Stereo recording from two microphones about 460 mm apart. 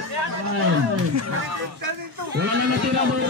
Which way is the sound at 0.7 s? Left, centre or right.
Right.